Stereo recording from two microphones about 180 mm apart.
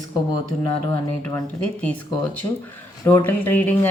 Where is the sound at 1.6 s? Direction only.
5° left (ahead or behind).